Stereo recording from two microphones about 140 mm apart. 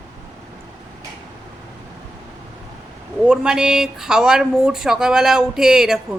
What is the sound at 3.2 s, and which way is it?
Speech, 5° right (ahead or behind).